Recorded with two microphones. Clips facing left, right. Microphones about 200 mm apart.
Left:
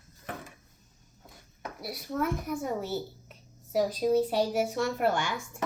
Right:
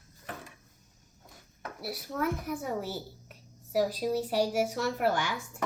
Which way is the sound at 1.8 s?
5° right (ahead or behind).